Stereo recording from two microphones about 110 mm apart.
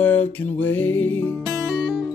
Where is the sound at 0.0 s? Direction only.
15° left (ahead or behind).